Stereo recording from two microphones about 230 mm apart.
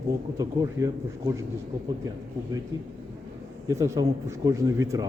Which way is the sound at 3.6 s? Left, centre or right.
Centre.